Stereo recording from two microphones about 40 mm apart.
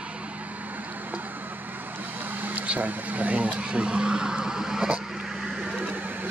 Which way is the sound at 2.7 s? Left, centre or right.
Right.